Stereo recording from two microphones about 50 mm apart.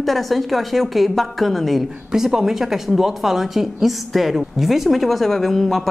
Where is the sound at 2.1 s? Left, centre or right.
Centre.